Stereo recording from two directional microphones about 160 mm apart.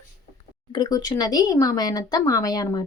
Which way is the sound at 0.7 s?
25° left (ahead or behind).